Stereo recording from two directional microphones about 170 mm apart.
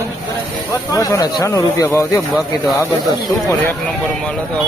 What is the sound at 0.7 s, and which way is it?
Speech, 20° left (ahead or behind).